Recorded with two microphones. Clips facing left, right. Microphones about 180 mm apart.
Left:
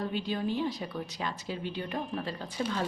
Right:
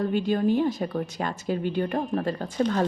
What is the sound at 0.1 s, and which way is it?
A woman's voice, 50° right (ahead or behind).